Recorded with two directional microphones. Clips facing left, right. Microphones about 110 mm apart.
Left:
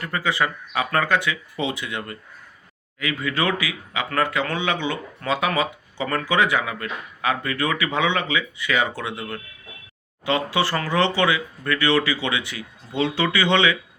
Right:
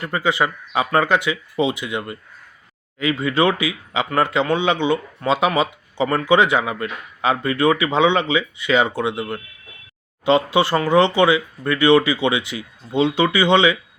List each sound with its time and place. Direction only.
0.0 s speech: 20° right (ahead or behind)